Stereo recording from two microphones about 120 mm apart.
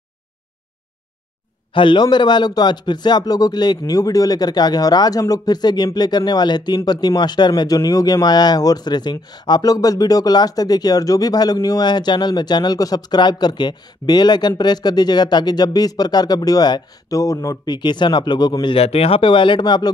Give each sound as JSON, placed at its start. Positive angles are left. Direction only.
{"t": 1.7, "sound": "speech", "side_deg": 45}
{"t": 18.8, "sound": "speech", "side_deg": 55}